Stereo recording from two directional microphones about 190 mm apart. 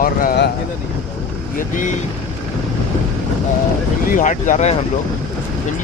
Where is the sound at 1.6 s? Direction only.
45° left (ahead or behind).